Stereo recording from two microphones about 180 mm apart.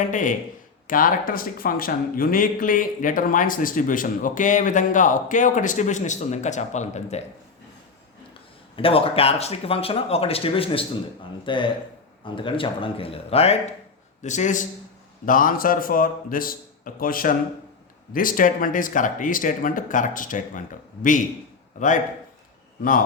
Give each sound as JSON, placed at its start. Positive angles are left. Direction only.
{"t": 0.1, "sound": "speech", "side_deg": 45}
{"t": 8.7, "sound": "a man's voice", "side_deg": 30}